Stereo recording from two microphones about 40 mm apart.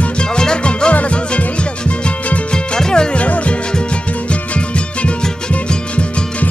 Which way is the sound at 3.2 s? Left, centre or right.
Left.